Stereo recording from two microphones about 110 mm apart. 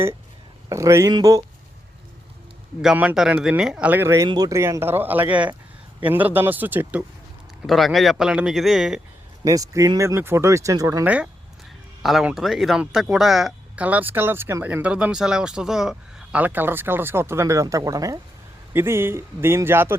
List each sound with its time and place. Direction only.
0.7 s speech: 25° right (ahead or behind)
2.9 s speech: 15° right (ahead or behind)
4.3 s speech: 35° right (ahead or behind); by 7.0 s 15° right (ahead or behind)
7.7 s speech: centre (ahead or behind)
9.4 s speech: 30° right (ahead or behind)
11.0 s speech: 10° right (ahead or behind)
12.0 s speech: centre (ahead or behind)
13.8 s speech: 15° right (ahead or behind)
16.4 s speech: 15° right (ahead or behind)